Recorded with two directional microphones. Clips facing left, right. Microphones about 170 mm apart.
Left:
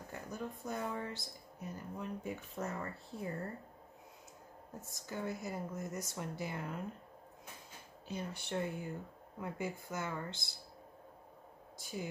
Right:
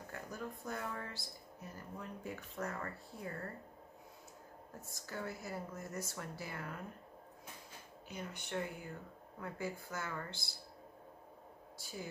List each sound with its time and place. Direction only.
0.1 s speech: 20° left (ahead or behind)
4.9 s speech: 20° left (ahead or behind)
8.1 s speech: 30° left (ahead or behind)
9.4 s speech: 20° left (ahead or behind)
11.8 s speech: 20° left (ahead or behind)